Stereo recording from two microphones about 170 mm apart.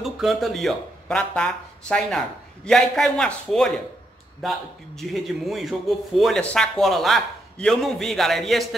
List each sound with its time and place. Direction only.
0.0 s a man's voice: centre (ahead or behind)